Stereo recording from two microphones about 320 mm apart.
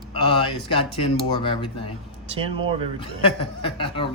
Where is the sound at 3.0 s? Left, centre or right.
Centre.